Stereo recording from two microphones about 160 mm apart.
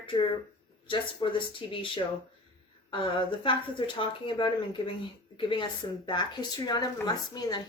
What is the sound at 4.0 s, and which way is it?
Speech, 30° left (ahead or behind).